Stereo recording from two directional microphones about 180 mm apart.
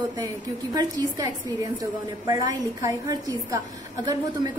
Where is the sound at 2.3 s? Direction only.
20° right (ahead or behind).